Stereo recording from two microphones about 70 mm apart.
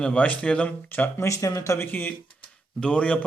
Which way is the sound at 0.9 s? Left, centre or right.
Left.